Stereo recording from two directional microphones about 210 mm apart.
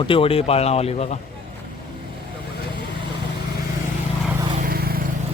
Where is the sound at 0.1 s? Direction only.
25° left (ahead or behind).